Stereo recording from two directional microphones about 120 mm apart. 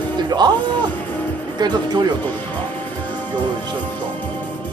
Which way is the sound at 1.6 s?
35° right (ahead or behind).